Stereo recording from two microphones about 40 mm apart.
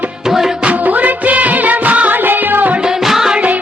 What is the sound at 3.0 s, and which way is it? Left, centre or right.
Music, centre.